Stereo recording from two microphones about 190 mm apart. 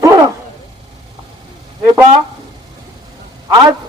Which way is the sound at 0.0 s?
20° right (ahead or behind).